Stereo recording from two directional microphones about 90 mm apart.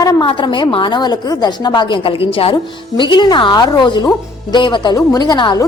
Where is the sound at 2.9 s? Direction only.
55° left (ahead or behind).